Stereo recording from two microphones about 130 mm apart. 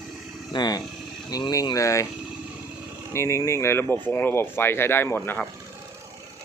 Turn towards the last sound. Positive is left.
turn(degrees=15)  # may be behind; listen again after turning